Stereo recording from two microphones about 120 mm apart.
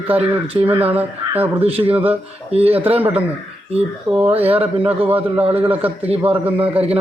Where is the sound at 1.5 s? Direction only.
55° right (ahead or behind).